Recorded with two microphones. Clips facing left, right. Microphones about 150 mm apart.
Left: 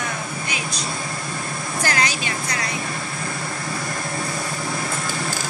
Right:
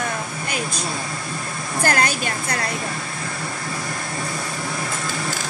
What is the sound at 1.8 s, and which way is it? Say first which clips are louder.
Speech: right 3 dB; 55° right (ahead or behind).